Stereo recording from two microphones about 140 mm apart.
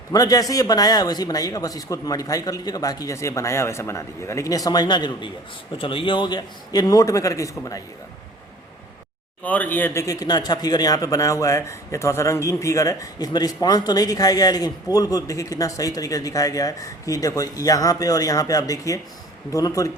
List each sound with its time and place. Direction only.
0.1 s speech: 25° left (ahead or behind)
9.4 s speech: 10° left (ahead or behind)